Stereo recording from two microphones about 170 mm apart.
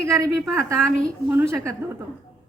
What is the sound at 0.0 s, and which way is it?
Speech, 15° right (ahead or behind).